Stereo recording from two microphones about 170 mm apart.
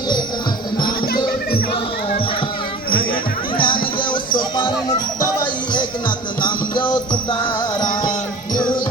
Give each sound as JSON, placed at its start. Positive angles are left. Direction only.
{"t": 3.6, "sound": "music", "side_deg": 30}
{"t": 4.4, "sound": "jingle bell", "side_deg": 30}
{"t": 6.4, "sound": "music", "side_deg": 25}